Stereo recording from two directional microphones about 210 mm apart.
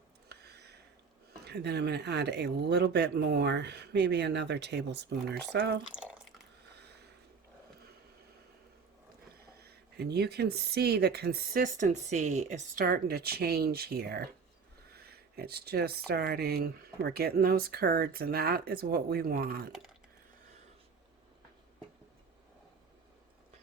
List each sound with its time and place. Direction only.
0.3 s a sound: 50° right (ahead or behind)
1.5 s speech: 55° right (ahead or behind)
5.9 s drip: 5° right (ahead or behind)
9.6 s speech: 50° right (ahead or behind)